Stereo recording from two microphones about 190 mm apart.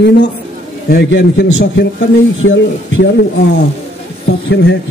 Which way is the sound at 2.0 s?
90° left.